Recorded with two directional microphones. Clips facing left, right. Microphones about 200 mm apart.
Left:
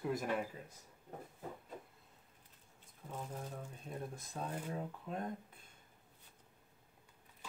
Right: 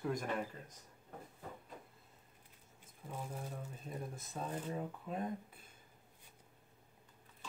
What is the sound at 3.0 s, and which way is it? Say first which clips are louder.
Speech: even; 10° right (ahead or behind).